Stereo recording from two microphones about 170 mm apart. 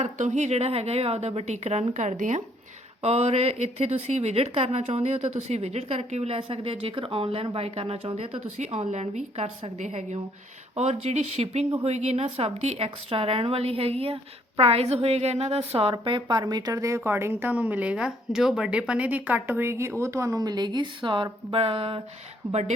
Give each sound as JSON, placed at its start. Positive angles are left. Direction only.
{"t": 0.0, "sound": "speech", "side_deg": -45}